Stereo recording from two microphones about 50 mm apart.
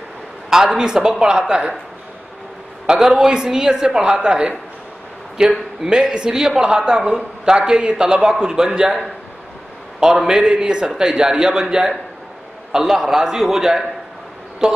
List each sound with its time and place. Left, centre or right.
0.5 s a woman's voice: centre
2.9 s a woman's voice: centre
9.9 s a woman's voice: centre